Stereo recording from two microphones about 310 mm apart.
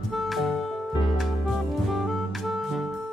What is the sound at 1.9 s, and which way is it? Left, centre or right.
Music, centre.